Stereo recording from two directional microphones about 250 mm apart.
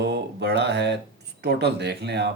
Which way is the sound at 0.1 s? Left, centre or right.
Right.